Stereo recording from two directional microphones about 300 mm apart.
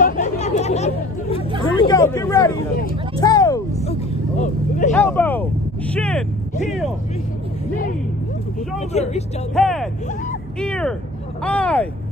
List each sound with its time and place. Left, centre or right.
0.0 s chatter: left
1.6 s vehicle: centre
4.9 s speech: centre
8.7 s speech: left
9.6 s speech: centre